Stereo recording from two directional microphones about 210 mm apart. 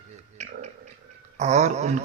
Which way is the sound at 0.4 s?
35° right (ahead or behind).